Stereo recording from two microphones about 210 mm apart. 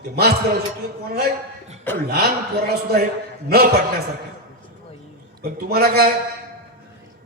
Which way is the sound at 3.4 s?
45° right (ahead or behind).